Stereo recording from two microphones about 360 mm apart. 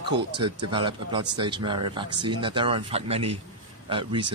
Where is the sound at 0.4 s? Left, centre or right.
Centre.